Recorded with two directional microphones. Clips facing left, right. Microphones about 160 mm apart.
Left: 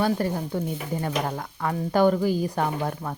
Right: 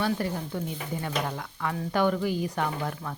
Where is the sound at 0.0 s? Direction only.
40° left (ahead or behind).